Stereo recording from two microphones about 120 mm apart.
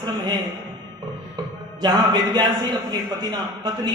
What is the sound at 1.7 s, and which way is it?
A man's voice, 35° right (ahead or behind).